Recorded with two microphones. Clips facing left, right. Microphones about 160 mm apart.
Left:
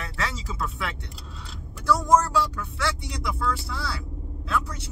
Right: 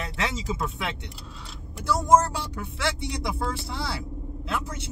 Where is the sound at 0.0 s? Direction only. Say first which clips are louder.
Right 2 dB; 20° right (ahead or behind).